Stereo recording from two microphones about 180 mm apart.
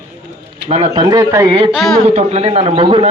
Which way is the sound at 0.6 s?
35° right (ahead or behind).